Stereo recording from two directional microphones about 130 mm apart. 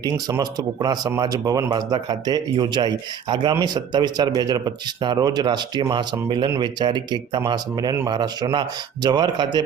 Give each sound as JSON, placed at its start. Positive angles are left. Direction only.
{"t": 0.0, "sound": "speech", "side_deg": -30}